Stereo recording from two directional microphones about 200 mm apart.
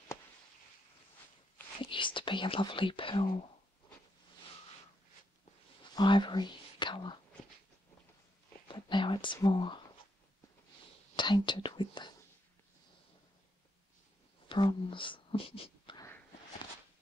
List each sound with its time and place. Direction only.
1.8 s speech: 25° left (ahead or behind)
5.9 s speech: 25° left (ahead or behind)
8.6 s speech: 25° left (ahead or behind)
11.1 s speech: 20° left (ahead or behind)
14.5 s speech: 25° left (ahead or behind)